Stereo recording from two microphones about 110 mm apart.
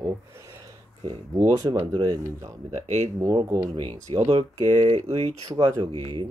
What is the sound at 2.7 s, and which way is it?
Speech, 90° right.